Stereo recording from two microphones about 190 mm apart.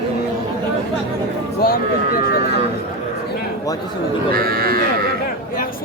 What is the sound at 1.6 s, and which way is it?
Speech, 50° left (ahead or behind).